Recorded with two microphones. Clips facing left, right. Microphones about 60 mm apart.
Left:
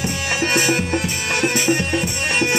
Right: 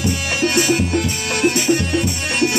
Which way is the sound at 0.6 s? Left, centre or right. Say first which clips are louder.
Right 3 dB; left.